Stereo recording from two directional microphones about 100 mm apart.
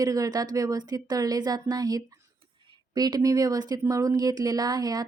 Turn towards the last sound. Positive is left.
turn(degrees=-40)  # may be behind; listen again after turning